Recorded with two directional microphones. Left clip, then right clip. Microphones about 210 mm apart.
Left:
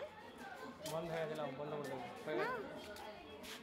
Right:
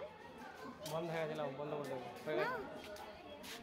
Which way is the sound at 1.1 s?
35° right (ahead or behind).